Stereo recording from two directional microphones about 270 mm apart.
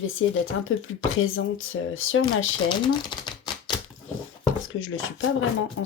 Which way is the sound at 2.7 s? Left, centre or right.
Centre.